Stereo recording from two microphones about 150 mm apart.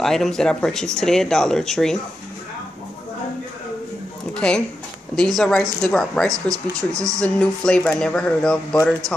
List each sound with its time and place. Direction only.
0.0 s speech: centre (ahead or behind)
4.3 s speech: 5° left (ahead or behind)
6.3 s speech: 20° right (ahead or behind)
7.2 s speech: 5° left (ahead or behind)